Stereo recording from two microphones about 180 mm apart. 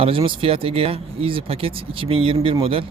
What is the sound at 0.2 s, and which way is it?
A man's voice, 30° right (ahead or behind).